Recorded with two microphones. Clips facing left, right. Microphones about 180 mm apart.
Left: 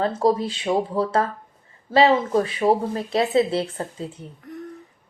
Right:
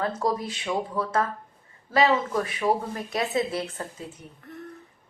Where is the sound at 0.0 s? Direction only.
30° left (ahead or behind).